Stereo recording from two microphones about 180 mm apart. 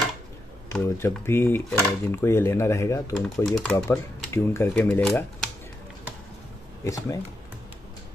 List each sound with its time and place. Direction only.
0.8 s speech: 15° left (ahead or behind)
3.2 s speech: centre (ahead or behind)
3.9 s speech: 15° left (ahead or behind)
6.8 s speech: 20° left (ahead or behind)